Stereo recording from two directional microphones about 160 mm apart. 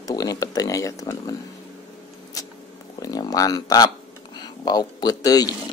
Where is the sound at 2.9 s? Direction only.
25° left (ahead or behind).